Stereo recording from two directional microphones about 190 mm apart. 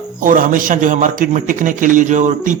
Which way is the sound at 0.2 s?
45° right (ahead or behind).